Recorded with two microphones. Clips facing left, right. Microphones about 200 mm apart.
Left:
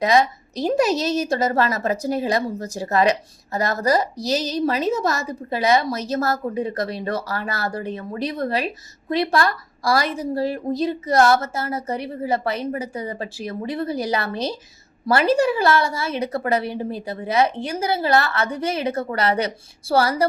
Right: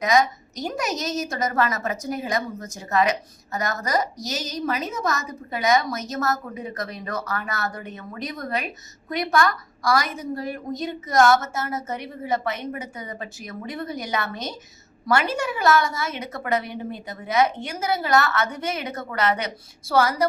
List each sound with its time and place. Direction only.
0.0 s a woman's voice: 30° left (ahead or behind)